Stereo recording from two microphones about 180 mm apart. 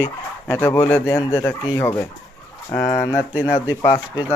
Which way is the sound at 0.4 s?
10° left (ahead or behind).